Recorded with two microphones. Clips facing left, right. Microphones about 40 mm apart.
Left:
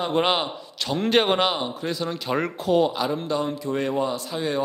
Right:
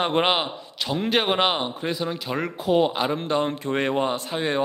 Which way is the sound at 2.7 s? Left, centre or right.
Right.